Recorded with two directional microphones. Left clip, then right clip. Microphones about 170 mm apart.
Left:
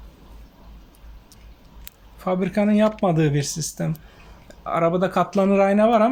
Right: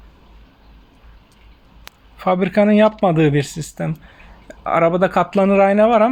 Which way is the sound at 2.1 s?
30° right (ahead or behind).